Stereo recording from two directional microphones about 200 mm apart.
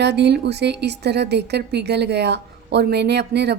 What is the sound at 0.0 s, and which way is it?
A woman's voice, 55° right (ahead or behind).